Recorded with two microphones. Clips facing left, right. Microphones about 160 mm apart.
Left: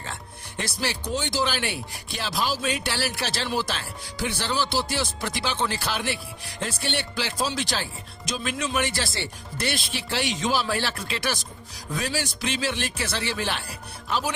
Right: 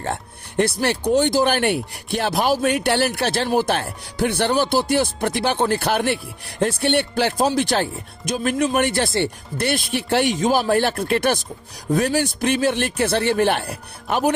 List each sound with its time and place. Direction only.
0.0 s speech: 60° right (ahead or behind)